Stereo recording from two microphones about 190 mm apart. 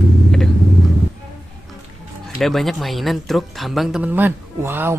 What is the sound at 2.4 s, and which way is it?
Speech, centre (ahead or behind).